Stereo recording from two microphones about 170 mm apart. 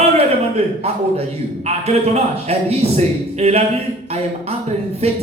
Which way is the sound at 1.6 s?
40° right (ahead or behind).